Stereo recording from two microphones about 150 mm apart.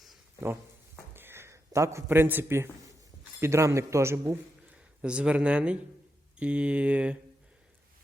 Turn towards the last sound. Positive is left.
turn(degrees=-10)  # may be behind; listen again after turning